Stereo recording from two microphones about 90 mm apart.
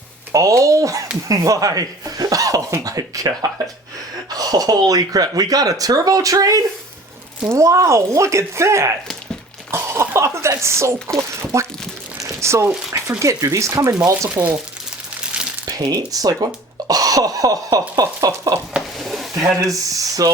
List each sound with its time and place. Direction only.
0.3 s speech: 35° right (ahead or behind)
12.2 s crumpling: 30° right (ahead or behind)
13.1 s speech: 35° right (ahead or behind)
15.6 s speech: 45° right (ahead or behind)
18.9 s sizzle: centre (ahead or behind)
19.6 s speech: 40° right (ahead or behind)